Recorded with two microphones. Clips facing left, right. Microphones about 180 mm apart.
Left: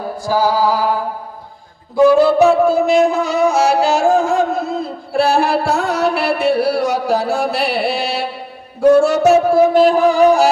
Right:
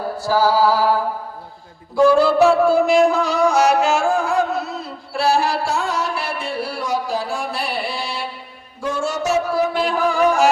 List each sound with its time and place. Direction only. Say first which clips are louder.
0.0 s music: left 1 dB; 15° left (ahead or behind)
2.0 s music: left 3 dB; 20° left (ahead or behind); by 10.5 s 35° left (ahead or behind)